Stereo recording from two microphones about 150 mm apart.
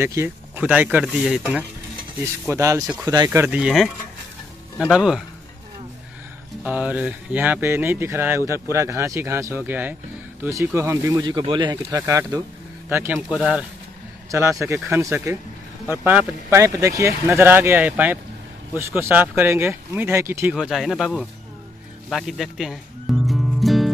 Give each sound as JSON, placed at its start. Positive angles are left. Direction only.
{"t": 0.0, "sound": "speech", "side_deg": -15}
{"t": 2.5, "sound": "speech", "side_deg": -20}
{"t": 6.6, "sound": "speech", "side_deg": -10}
{"t": 14.3, "sound": "speech", "side_deg": -20}
{"t": 20.5, "sound": "speech", "side_deg": 0}
{"t": 22.1, "sound": "music", "side_deg": 0}